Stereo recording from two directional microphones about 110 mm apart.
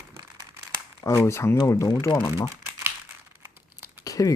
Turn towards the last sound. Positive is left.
turn(degrees=30)  # may be behind; listen again after turning